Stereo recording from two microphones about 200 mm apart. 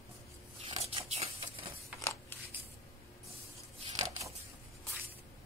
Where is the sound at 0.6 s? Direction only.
25° right (ahead or behind).